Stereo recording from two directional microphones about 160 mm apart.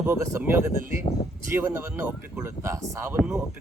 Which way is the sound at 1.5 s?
15° right (ahead or behind).